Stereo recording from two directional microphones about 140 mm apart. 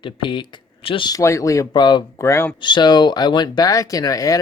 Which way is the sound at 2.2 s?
20° left (ahead or behind).